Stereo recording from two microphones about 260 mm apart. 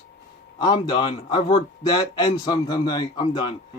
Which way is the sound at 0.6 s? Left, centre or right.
Centre.